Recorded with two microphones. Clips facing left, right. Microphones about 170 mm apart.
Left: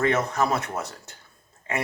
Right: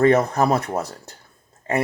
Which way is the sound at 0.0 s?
35° right (ahead or behind).